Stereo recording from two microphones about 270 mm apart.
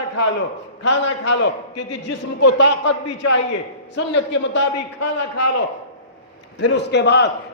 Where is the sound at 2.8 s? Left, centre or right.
Left.